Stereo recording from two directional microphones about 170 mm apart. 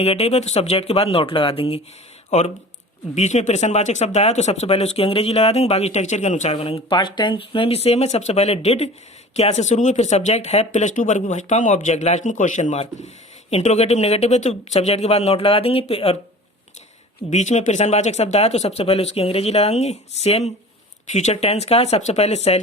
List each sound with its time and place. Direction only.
0.0 s speech: 35° left (ahead or behind)
2.3 s speech: 45° left (ahead or behind)
17.2 s speech: 45° left (ahead or behind)